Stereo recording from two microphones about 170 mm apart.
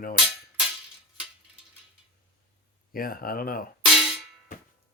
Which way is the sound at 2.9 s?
60° left (ahead or behind).